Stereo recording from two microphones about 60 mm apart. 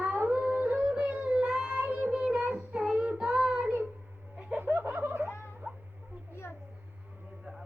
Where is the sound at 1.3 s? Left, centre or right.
Centre.